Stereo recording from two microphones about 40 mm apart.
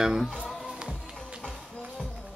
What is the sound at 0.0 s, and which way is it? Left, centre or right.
Speech, centre.